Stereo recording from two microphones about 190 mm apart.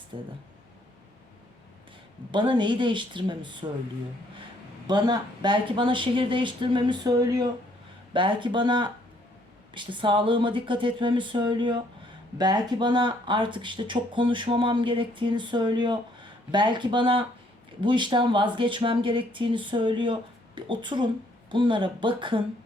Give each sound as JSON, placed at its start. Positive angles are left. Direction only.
{"t": 0.1, "sound": "speech", "side_deg": -25}
{"t": 2.3, "sound": "speech", "side_deg": -25}
{"t": 4.9, "sound": "speech", "side_deg": -20}